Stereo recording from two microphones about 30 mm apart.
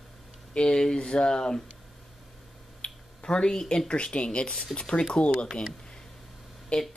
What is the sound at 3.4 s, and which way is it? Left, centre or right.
Speech, left.